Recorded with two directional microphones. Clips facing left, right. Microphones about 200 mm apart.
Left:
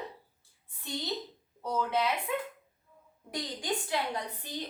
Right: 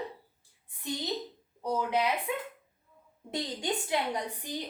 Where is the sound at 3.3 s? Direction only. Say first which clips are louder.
Right 2 dB; 20° right (ahead or behind).